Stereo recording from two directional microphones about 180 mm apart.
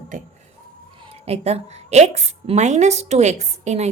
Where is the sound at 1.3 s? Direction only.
35° right (ahead or behind).